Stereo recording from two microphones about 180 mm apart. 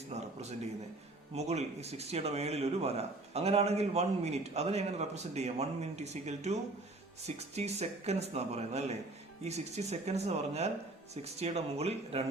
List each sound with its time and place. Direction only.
0.1 s speech: 40° right (ahead or behind)